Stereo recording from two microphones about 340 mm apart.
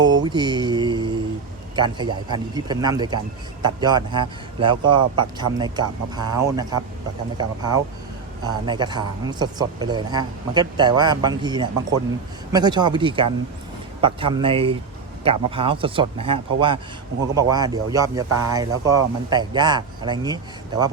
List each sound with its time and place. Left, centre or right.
0.0 s mantra: centre
1.7 s speech: centre